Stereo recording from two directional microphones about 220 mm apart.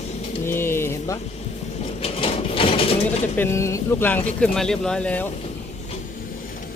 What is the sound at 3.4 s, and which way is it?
Speech, 10° left (ahead or behind).